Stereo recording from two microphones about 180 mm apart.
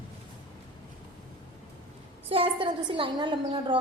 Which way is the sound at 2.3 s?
30° right (ahead or behind).